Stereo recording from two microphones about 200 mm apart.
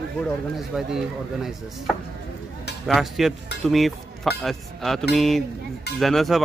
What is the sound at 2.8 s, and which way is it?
Speech, centre (ahead or behind).